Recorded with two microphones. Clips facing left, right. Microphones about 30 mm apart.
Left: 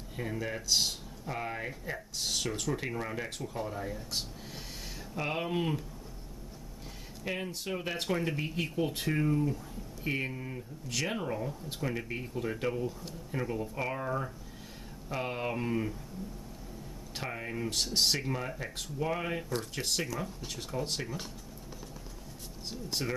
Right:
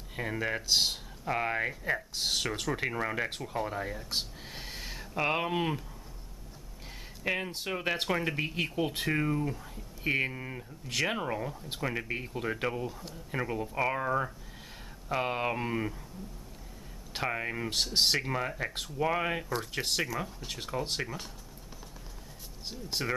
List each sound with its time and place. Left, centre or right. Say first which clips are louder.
0.1 s speech: right 3 dB; right
7.2 s speech: right 3 dB; right
17.1 s speech: right 5 dB; right
22.7 s speech: right 2 dB; centre